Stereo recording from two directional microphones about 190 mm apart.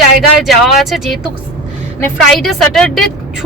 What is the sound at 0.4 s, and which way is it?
Speech, centre (ahead or behind).